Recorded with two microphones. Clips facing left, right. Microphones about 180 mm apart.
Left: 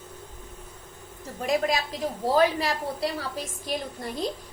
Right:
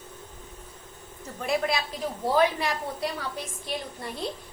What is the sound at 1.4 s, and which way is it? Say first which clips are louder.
A woman's voice: left 2 dB; 40° left (ahead or behind).